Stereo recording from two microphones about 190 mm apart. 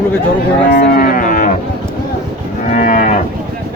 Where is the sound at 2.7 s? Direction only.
45° left (ahead or behind).